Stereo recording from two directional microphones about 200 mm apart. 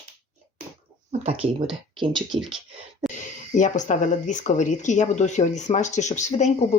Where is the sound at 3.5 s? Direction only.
35° left (ahead or behind).